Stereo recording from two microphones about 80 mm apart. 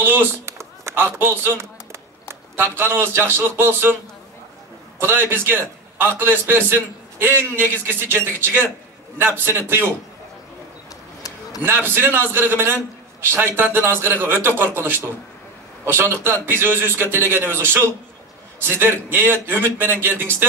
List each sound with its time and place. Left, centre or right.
0.0 s a sound: right
4.9 s a man's voice: right
11.6 s a man's voice: right